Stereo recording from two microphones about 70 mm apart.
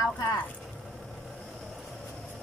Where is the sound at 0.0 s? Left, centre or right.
Left.